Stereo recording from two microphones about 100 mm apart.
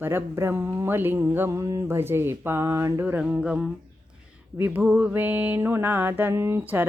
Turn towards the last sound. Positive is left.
turn(degrees=-20)  # may be behind; listen again after turning